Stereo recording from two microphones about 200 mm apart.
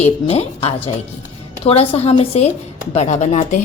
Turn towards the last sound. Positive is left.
turn(degrees=35)  # may be behind; listen again after turning